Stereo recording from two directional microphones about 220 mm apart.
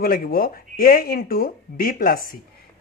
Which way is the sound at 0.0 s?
40° left (ahead or behind).